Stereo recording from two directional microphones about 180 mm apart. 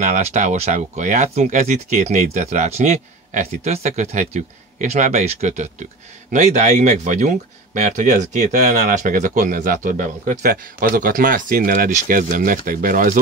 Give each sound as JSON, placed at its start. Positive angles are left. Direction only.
{"t": 0.0, "sound": "speech", "side_deg": -40}